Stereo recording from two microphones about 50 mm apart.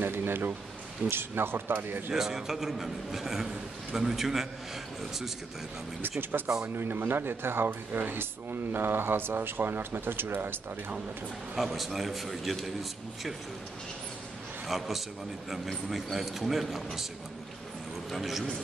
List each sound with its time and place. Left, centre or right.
0.0 s a sound: right
1.1 s speech: right
2.1 s a man's voice: centre
6.3 s speech: right
11.5 s a man's voice: centre
14.7 s a man's voice: centre
18.1 s a man's voice: centre